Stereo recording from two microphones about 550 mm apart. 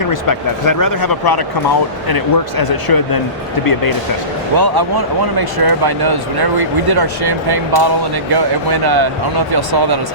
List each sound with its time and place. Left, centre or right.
0.0 s speech: left
4.5 s speech: right